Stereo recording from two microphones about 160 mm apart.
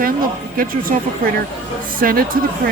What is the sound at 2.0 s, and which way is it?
Music, 65° right (ahead or behind).